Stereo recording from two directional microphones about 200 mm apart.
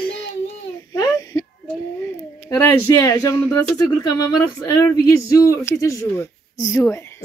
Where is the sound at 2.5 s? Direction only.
10° left (ahead or behind).